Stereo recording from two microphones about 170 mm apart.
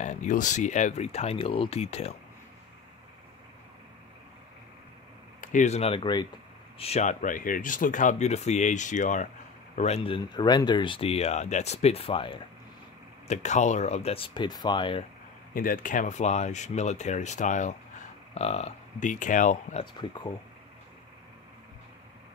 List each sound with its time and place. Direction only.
0.0 s speech: 45° left (ahead or behind)
5.4 s speech: 50° left (ahead or behind); by 6.2 s 30° left (ahead or behind)
6.8 s speech: 40° left (ahead or behind)
13.3 s speech: 45° left (ahead or behind)
15.5 s speech: 55° left (ahead or behind)
19.8 s speech: 25° left (ahead or behind)